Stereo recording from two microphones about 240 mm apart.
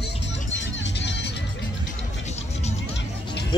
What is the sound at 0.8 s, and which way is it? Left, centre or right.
Music, left.